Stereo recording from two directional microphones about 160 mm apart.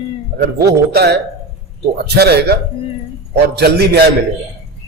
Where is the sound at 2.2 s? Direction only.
90° right.